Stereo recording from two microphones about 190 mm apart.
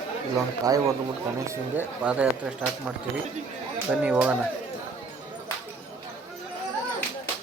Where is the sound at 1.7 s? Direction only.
5° right (ahead or behind).